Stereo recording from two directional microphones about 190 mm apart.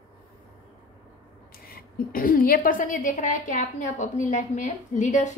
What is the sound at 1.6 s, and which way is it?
A woman's voice, 50° left (ahead or behind).